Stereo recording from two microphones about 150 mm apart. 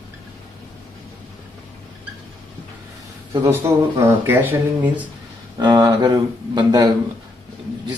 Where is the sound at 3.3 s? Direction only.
20° right (ahead or behind).